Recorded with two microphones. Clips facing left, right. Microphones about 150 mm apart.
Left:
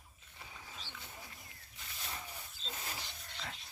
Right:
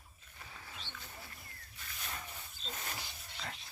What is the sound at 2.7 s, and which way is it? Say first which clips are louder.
Vehicle: right 1 dB; 10° left (ahead or behind).